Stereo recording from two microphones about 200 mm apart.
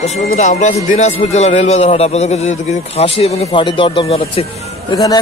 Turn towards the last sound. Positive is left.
turn(degrees=20)  # may be behind; listen again after turning